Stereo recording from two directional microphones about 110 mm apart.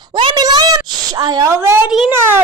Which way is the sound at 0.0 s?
45° right (ahead or behind).